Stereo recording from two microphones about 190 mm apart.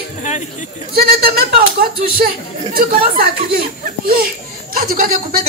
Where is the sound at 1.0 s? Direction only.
55° right (ahead or behind).